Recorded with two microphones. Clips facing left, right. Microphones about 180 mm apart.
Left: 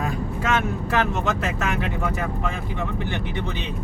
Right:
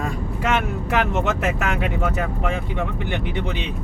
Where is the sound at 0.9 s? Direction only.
20° right (ahead or behind).